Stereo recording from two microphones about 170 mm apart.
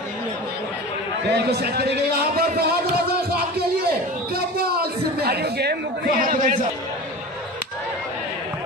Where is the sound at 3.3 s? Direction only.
65° right (ahead or behind).